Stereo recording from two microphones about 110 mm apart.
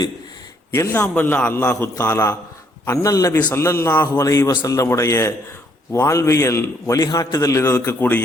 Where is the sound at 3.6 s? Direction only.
25° left (ahead or behind).